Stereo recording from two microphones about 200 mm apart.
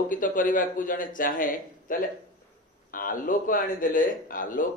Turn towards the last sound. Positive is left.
turn(degrees=40)  # may be behind; listen again after turning